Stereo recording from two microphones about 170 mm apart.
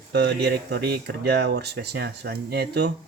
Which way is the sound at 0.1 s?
75° right (ahead or behind).